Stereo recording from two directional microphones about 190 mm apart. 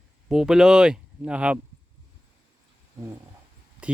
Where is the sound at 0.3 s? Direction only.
5° right (ahead or behind).